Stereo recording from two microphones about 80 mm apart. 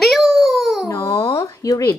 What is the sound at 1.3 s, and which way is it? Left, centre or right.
Speech, left.